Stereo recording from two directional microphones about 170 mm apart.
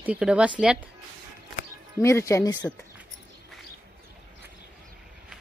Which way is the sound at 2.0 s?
15° left (ahead or behind).